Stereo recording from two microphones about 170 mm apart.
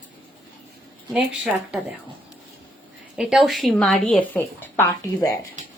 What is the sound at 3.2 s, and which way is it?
A woman's voice, centre (ahead or behind).